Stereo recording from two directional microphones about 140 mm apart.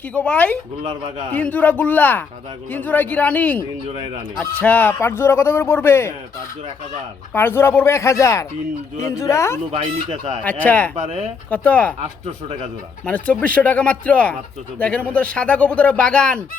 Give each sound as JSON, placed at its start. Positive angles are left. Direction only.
{"t": 0.1, "sound": "speech", "side_deg": 10}
{"t": 7.3, "sound": "speech", "side_deg": 15}
{"t": 9.7, "sound": "speech", "side_deg": -50}
{"t": 10.4, "sound": "speech", "side_deg": 10}
{"t": 10.9, "sound": "speech", "side_deg": -50}
{"t": 11.5, "sound": "speech", "side_deg": 10}
{"t": 13.1, "sound": "speech", "side_deg": 10}